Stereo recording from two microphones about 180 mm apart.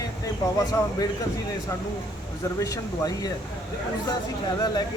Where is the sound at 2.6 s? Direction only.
20° left (ahead or behind).